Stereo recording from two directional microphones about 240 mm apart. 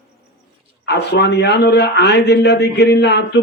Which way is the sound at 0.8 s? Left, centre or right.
Left.